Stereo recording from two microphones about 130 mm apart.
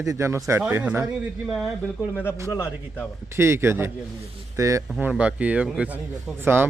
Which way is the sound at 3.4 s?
20° right (ahead or behind).